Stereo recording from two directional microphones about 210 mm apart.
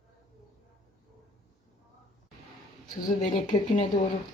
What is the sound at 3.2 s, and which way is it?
Speech, 35° left (ahead or behind).